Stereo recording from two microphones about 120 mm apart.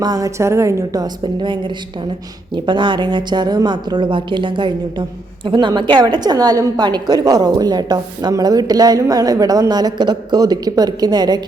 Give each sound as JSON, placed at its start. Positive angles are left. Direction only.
{"t": 0.0, "sound": "a woman's voice", "side_deg": -30}
{"t": 1.0, "sound": "a woman's voice", "side_deg": -40}